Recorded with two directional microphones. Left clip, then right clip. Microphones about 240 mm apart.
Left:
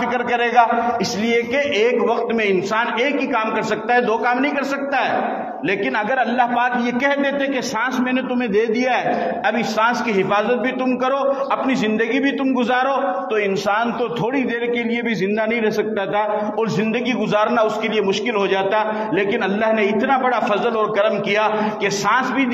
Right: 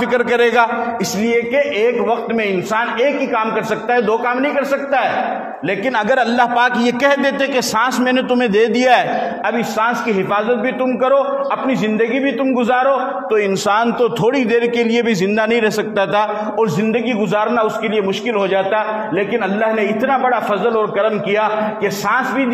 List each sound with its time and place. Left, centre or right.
0.1 s a man's voice: right
1.3 s a man's voice: right
6.0 s a man's voice: right
9.8 s a man's voice: right
12.5 s a man's voice: right
13.7 s a man's voice: right
17.3 s a man's voice: right
19.1 s a man's voice: right